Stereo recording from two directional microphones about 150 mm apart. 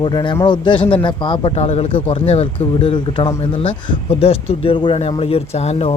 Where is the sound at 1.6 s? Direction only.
45° left (ahead or behind).